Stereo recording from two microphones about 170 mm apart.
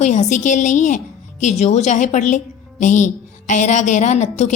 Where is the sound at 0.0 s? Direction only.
45° left (ahead or behind).